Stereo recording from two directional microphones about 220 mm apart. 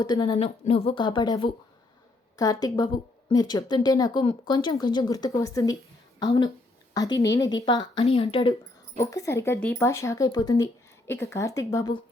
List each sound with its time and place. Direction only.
0.0 s speech: 15° left (ahead or behind)